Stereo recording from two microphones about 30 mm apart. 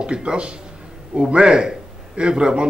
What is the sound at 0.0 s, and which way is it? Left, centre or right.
Speech, right.